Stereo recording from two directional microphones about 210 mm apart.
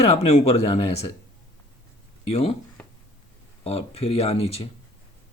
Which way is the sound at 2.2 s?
30° left (ahead or behind).